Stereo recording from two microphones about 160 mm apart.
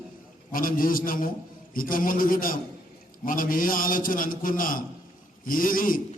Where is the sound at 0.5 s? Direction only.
60° left (ahead or behind).